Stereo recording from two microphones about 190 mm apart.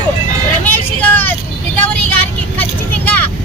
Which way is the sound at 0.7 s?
10° left (ahead or behind).